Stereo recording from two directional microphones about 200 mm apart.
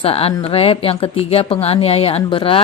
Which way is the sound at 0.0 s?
30° left (ahead or behind).